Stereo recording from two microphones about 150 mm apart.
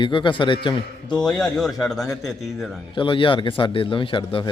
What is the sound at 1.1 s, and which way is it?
Speech, 5° left (ahead or behind).